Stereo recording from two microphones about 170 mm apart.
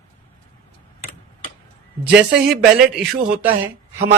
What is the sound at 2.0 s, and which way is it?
Speech, 5° right (ahead or behind).